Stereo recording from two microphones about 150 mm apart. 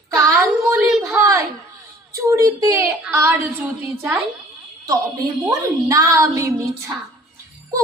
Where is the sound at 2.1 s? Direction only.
20° right (ahead or behind).